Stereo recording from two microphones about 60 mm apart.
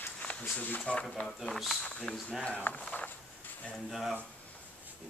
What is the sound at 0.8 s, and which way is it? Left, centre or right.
Speech, left.